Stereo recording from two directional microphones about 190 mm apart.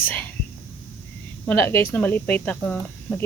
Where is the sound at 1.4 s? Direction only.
10° left (ahead or behind).